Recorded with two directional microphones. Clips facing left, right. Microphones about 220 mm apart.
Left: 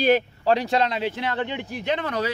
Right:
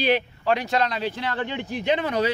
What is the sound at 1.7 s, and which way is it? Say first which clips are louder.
Speech: right 5 dB; centre (ahead or behind).